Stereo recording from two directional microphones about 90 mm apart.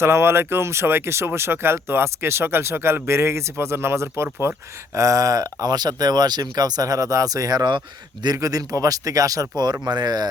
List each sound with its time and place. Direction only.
0.0 s speech: 30° right (ahead or behind); by 10.2 s 50° right (ahead or behind)